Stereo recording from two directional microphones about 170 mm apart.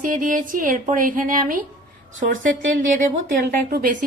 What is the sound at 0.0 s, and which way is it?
A woman's voice, 55° right (ahead or behind).